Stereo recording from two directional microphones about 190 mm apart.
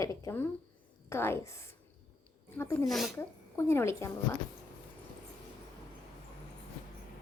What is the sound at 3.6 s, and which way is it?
Speech, 15° left (ahead or behind).